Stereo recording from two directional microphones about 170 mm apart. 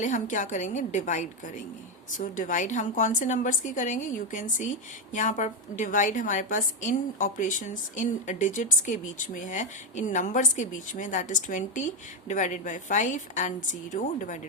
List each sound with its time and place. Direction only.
0.0 s a woman's voice: 50° left (ahead or behind)